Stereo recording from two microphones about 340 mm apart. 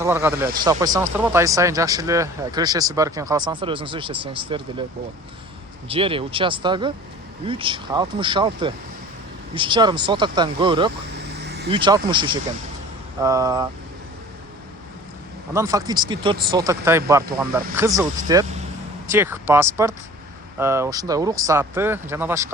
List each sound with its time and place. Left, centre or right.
0.0 s speech: centre
5.9 s speech: centre
11.3 s vehicle: right
11.7 s speech: centre
15.5 s speech: centre